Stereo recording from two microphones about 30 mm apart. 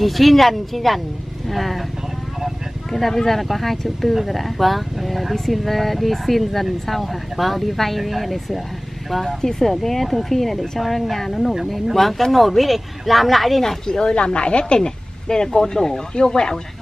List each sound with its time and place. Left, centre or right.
0.0 s speech: centre
2.9 s speech: centre
13.6 s speech: centre
14.0 s speech: left; by 16.0 s centre
16.2 s speech: left